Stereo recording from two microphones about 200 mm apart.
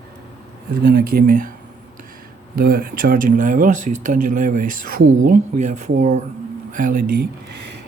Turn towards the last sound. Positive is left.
turn(degrees=-50)  # may be behind; listen again after turning